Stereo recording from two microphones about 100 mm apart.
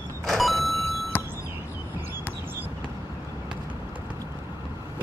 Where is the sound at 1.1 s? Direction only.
20° left (ahead or behind).